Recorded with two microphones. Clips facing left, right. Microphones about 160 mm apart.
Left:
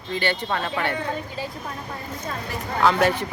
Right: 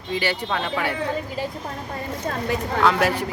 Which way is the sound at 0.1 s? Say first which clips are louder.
Even; 10° right (ahead or behind).